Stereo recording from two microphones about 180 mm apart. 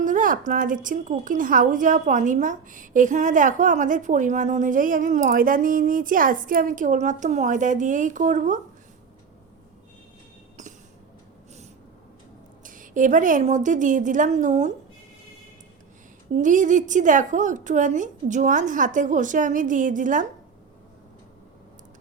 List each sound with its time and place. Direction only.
0.0 s a woman's voice: 50° right (ahead or behind)
10.6 s train: 40° right (ahead or behind)
12.6 s a woman's voice: 45° right (ahead or behind)
16.3 s a woman's voice: 45° right (ahead or behind)